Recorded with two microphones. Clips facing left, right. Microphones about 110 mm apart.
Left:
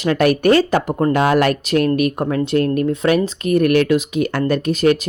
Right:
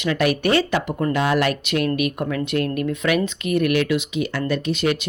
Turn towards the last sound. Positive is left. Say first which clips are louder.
# left 6 dB
turn(degrees=45)  # may be behind; listen again after turning